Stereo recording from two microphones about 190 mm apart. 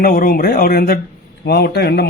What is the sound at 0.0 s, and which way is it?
A man's voice, 50° left (ahead or behind).